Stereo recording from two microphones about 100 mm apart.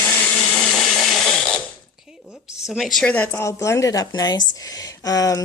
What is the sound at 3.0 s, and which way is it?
Speech, 15° left (ahead or behind).